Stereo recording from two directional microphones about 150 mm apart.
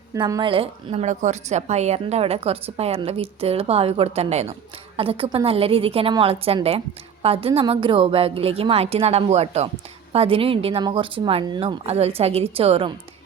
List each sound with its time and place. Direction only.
0.1 s a woman's voice: 25° right (ahead or behind); by 12.9 s 40° right (ahead or behind)